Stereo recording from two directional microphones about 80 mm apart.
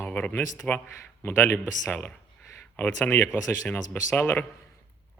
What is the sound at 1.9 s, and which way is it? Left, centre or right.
Speech, centre.